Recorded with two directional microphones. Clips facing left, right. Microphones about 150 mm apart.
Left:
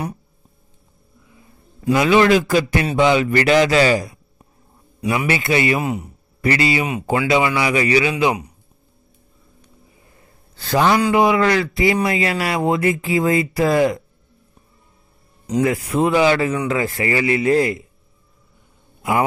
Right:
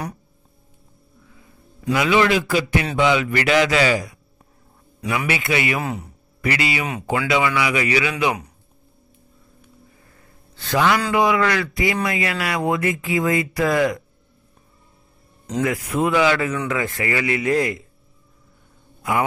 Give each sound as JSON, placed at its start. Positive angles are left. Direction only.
{"t": 1.9, "sound": "speech", "side_deg": 40}
{"t": 5.8, "sound": "speech", "side_deg": 20}
{"t": 6.4, "sound": "speech", "side_deg": 35}
{"t": 10.5, "sound": "a man's voice", "side_deg": 35}
{"t": 15.6, "sound": "speech", "side_deg": 30}